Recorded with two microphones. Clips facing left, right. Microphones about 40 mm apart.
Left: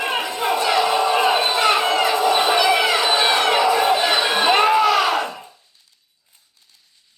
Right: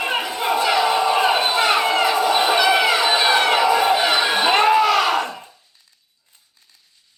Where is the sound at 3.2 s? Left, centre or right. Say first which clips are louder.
Right 1 dB; centre.